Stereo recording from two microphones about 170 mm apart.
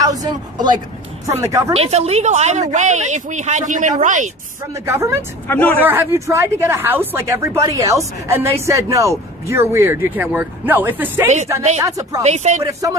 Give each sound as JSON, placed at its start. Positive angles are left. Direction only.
{"t": 0.0, "sound": "speech", "side_deg": -20}
{"t": 1.7, "sound": "a woman's voice", "side_deg": -40}
{"t": 4.7, "sound": "speech", "side_deg": -15}
{"t": 5.5, "sound": "speech", "side_deg": 10}
{"t": 5.8, "sound": "speech", "side_deg": -10}
{"t": 12.2, "sound": "speech", "side_deg": -40}